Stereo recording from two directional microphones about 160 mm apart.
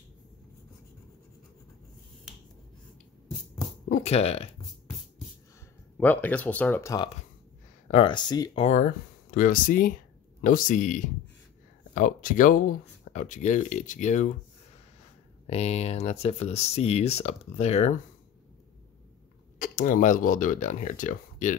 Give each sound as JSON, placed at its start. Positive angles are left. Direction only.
{"t": 3.9, "sound": "speech", "side_deg": 40}
{"t": 5.9, "sound": "speech", "side_deg": 10}
{"t": 7.9, "sound": "speech", "side_deg": 30}
{"t": 8.6, "sound": "speech", "side_deg": 55}
{"t": 15.4, "sound": "speech", "side_deg": 40}
{"t": 19.6, "sound": "speech", "side_deg": 55}